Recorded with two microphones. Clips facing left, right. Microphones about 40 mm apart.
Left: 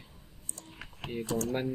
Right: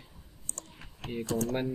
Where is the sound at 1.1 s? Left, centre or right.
Centre.